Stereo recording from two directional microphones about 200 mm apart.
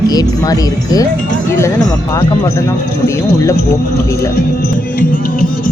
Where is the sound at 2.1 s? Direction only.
15° left (ahead or behind).